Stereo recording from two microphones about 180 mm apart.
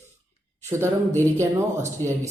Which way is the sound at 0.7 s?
15° right (ahead or behind).